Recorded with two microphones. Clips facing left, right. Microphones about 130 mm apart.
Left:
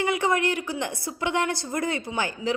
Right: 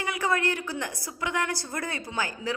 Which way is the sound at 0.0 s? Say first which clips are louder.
Left 4 dB; 25° left (ahead or behind).